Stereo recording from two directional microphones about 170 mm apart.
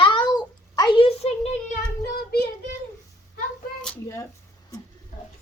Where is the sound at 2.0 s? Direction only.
70° left (ahead or behind).